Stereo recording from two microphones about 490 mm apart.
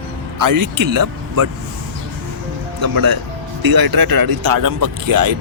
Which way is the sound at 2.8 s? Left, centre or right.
Right.